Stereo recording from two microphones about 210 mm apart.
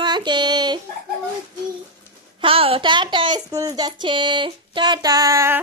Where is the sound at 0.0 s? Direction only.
20° right (ahead or behind).